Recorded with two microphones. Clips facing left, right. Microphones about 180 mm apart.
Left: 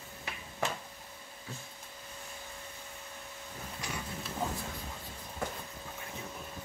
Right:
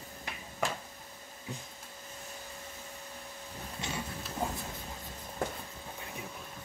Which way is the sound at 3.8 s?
25° right (ahead or behind).